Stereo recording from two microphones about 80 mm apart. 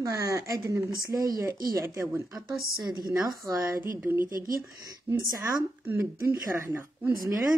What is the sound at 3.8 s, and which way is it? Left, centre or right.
Speech, right.